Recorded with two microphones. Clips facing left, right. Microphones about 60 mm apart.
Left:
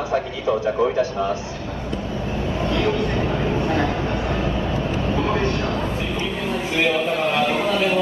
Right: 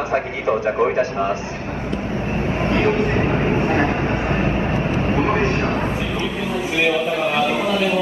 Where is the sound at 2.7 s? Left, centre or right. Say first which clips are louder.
Right 3 dB; right.